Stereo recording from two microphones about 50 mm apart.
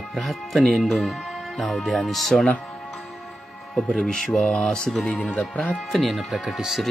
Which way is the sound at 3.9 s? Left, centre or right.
Centre.